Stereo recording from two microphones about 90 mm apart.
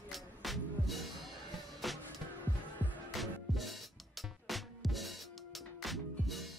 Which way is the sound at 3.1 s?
Centre (ahead or behind).